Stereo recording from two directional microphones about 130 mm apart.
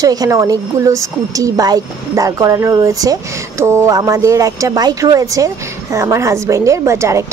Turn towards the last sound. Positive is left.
turn(degrees=-20)  # may be behind; listen again after turning